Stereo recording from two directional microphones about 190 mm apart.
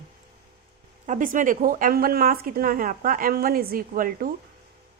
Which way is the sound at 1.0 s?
40° right (ahead or behind).